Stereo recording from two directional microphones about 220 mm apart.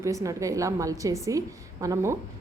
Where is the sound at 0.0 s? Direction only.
15° right (ahead or behind).